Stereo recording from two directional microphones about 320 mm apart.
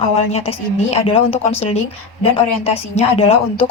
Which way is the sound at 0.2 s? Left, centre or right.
Centre.